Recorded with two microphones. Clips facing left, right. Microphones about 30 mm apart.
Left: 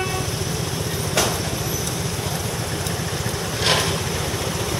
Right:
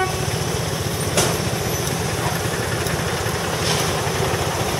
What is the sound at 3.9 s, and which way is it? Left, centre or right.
Vehicle, centre.